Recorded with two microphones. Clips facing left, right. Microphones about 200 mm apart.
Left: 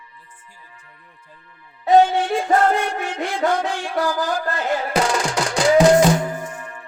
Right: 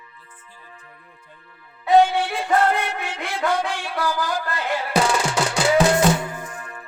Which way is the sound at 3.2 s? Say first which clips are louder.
Left 2 dB; 45° left (ahead or behind).